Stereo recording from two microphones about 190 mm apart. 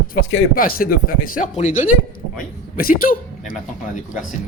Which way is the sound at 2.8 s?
50° left (ahead or behind).